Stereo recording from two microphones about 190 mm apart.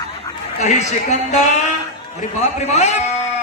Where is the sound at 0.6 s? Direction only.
35° left (ahead or behind).